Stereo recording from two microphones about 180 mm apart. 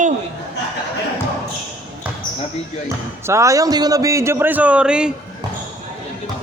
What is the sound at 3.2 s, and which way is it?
A man's voice, 15° right (ahead or behind).